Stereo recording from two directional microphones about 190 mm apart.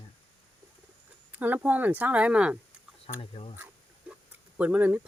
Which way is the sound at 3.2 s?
30° left (ahead or behind).